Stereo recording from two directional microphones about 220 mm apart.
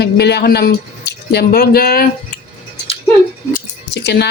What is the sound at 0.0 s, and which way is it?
Speech, 50° left (ahead or behind).